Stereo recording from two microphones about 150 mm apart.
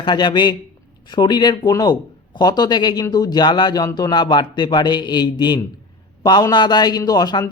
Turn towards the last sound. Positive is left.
turn(degrees=25)  # may be behind; listen again after turning